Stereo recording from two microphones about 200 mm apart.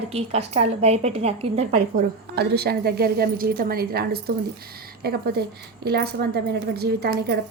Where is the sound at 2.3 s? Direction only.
55° right (ahead or behind).